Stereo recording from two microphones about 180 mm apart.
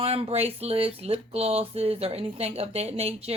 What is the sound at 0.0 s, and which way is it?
Speech, 35° right (ahead or behind).